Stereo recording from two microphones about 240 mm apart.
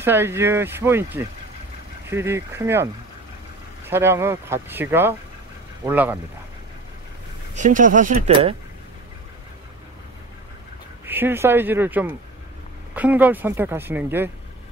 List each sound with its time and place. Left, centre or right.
0.0 s speech: centre
7.5 s speech: right
11.1 s speech: centre